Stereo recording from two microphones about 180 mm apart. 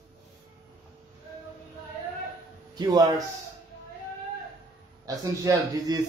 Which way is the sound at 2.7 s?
20° right (ahead or behind).